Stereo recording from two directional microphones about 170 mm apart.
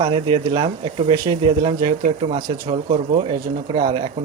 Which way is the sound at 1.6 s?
50° right (ahead or behind).